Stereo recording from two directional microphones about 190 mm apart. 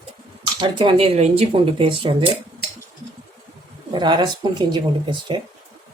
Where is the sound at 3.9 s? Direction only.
25° right (ahead or behind).